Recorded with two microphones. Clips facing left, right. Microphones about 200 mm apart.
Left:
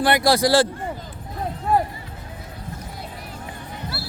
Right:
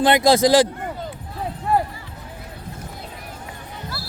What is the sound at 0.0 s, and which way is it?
Speech, 20° right (ahead or behind).